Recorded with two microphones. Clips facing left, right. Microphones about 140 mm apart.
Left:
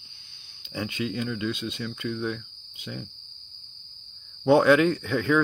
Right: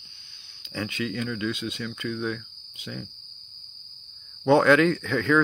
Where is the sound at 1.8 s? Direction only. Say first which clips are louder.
Even; 15° left (ahead or behind).